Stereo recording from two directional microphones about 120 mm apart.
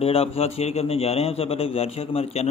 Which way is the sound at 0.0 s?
55° left (ahead or behind).